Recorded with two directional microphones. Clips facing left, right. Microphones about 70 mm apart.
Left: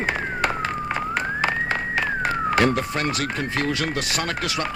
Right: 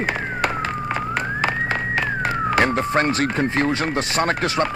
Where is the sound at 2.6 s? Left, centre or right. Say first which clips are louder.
Right 3 dB; right.